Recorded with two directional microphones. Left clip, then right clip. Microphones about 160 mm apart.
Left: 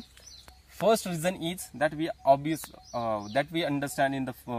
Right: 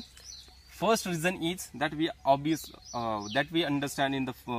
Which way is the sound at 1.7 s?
35° left (ahead or behind).